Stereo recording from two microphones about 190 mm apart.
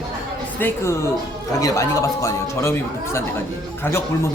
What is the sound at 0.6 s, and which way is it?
Speech, 15° left (ahead or behind).